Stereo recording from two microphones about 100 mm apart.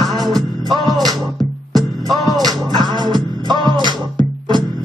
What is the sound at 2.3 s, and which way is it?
Music, 45° right (ahead or behind).